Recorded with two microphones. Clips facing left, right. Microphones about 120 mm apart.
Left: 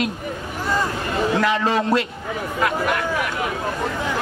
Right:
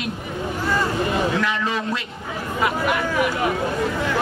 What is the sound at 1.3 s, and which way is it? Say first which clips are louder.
Speech: left 4 dB; 40° left (ahead or behind).